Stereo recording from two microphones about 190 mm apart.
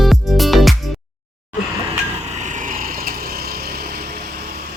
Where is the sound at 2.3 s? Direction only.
40° right (ahead or behind).